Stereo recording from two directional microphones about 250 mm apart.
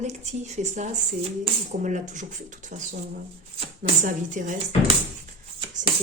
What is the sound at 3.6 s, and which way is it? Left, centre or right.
Speech, right.